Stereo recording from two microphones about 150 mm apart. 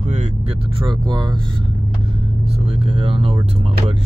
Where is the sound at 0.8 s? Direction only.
30° right (ahead or behind).